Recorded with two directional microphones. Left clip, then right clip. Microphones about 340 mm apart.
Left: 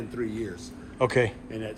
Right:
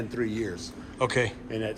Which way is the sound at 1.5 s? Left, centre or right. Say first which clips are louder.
Right 4 dB; right.